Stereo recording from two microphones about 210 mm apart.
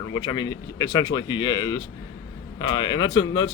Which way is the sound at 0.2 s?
20° left (ahead or behind).